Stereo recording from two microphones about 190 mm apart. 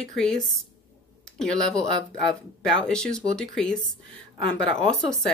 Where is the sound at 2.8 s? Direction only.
5° left (ahead or behind).